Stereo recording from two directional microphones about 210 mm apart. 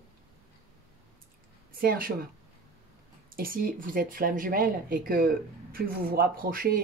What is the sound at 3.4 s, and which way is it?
Speech, 45° right (ahead or behind).